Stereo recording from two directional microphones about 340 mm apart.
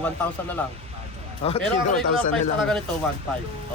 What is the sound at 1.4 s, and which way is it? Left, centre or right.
Speech, centre.